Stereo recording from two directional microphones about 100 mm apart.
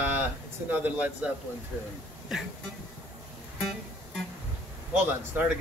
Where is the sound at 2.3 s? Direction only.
5° right (ahead or behind).